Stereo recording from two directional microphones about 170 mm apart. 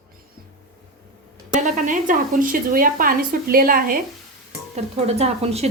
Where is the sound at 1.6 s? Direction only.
45° right (ahead or behind).